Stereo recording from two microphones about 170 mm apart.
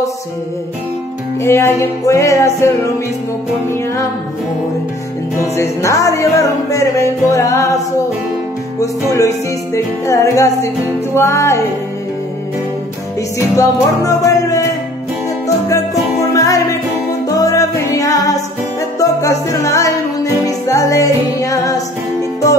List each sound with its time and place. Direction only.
1.4 s music: 15° left (ahead or behind)
5.6 s music: 15° left (ahead or behind)
10.0 s music: 15° left (ahead or behind)
13.4 s music: 20° left (ahead or behind)